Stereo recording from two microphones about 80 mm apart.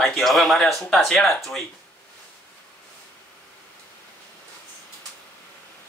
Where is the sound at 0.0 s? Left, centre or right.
Centre.